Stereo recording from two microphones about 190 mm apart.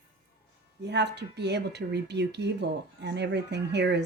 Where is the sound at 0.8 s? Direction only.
65° right (ahead or behind).